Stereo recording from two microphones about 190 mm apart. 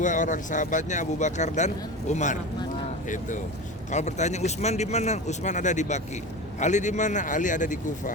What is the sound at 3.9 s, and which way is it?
A man's voice, 40° left (ahead or behind).